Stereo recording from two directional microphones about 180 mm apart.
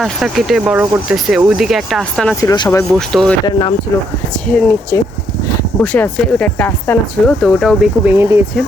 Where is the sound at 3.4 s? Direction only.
25° left (ahead or behind).